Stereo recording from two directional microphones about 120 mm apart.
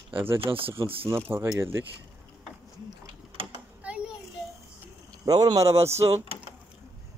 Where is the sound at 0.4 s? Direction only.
50° right (ahead or behind).